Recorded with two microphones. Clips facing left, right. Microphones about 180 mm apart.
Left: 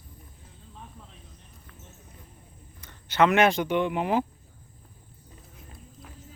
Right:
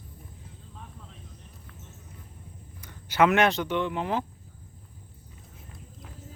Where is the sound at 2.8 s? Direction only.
10° right (ahead or behind).